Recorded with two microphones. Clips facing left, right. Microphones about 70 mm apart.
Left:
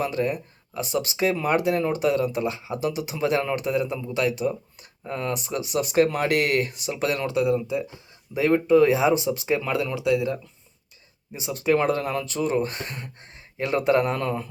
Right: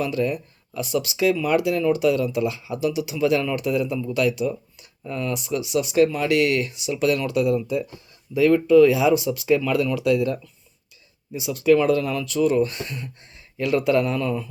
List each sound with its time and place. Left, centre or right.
0.0 s speech: left
11.3 s speech: left